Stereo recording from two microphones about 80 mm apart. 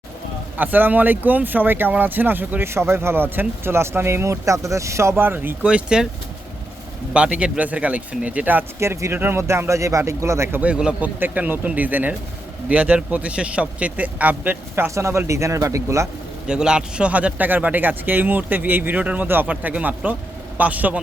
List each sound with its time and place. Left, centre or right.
0.5 s speech: right
5.6 s speech: centre
7.1 s speech: centre
8.8 s speech: right
10.6 s speech: centre
11.2 s speech: right
16.5 s speech: centre